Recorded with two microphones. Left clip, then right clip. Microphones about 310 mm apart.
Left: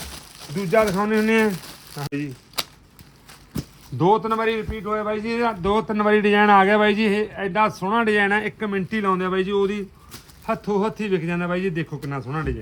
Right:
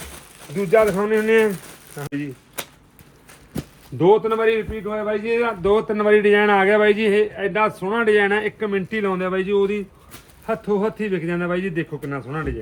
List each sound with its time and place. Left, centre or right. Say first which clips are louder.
0.0 s speech: left 1 dB; left
3.9 s a man's voice: right 3 dB; centre